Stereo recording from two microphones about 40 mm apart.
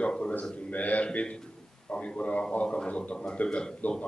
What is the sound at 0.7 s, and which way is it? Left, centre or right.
Speech, left.